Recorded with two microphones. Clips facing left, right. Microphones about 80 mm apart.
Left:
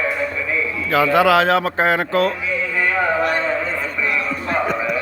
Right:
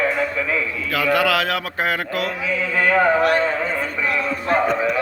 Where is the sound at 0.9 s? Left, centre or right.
Left.